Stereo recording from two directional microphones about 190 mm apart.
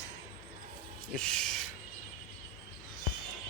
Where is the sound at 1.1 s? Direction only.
5° left (ahead or behind).